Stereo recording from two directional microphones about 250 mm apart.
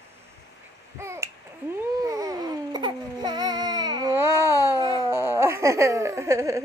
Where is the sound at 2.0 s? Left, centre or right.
Centre.